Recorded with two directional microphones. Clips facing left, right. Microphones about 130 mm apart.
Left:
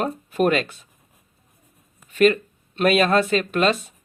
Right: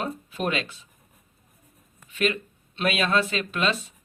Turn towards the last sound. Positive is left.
turn(degrees=45)  # may be behind; listen again after turning